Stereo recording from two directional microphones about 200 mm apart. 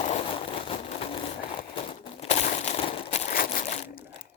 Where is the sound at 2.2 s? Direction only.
35° left (ahead or behind).